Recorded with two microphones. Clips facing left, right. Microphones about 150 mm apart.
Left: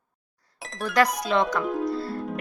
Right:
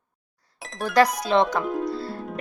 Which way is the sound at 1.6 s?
Centre (ahead or behind).